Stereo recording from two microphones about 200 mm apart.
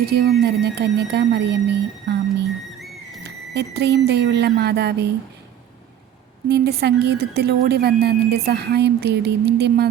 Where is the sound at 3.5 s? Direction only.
55° right (ahead or behind).